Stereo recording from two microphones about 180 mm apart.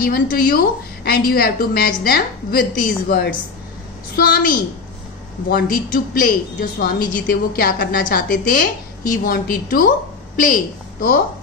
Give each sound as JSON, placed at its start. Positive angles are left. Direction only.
{"t": 0.0, "sound": "a woman's voice", "side_deg": 55}